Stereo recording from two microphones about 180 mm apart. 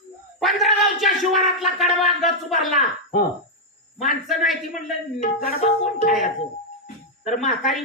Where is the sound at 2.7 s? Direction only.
45° left (ahead or behind).